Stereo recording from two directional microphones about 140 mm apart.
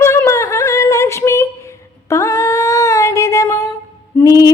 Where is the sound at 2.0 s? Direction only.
20° left (ahead or behind).